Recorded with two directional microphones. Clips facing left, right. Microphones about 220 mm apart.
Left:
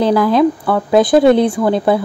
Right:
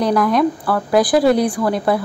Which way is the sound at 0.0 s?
25° left (ahead or behind).